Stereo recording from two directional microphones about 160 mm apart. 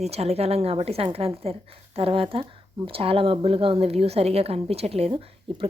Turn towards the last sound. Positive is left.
turn(degrees=-35)  # may be behind; listen again after turning